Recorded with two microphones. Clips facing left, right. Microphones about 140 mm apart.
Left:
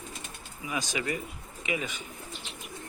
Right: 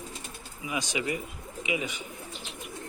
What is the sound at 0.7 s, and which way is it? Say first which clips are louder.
Speech: right 1 dB; 15° right (ahead or behind).